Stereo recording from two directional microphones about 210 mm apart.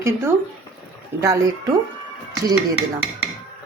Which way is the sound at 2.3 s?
20° right (ahead or behind).